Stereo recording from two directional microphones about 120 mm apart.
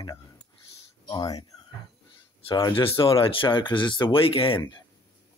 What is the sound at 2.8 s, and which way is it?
Speech, 50° left (ahead or behind).